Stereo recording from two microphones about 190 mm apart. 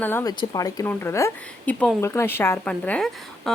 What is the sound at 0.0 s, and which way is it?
A woman's voice, 10° left (ahead or behind).